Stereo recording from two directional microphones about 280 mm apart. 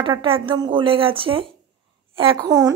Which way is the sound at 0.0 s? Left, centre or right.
Centre.